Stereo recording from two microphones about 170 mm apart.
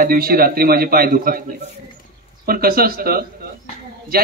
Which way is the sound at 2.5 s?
60° right (ahead or behind).